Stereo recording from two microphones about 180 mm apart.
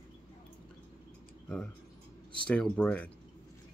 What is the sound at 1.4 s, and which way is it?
Speech, 5° left (ahead or behind).